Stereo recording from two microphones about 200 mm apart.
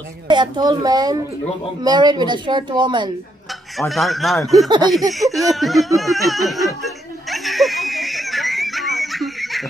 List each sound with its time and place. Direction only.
0.3 s a woman's voice: 20° right (ahead or behind)
3.7 s speech: centre (ahead or behind)
4.6 s a woman's voice: 20° right (ahead or behind)
5.1 s speech: centre (ahead or behind)
5.9 s laughter: centre (ahead or behind)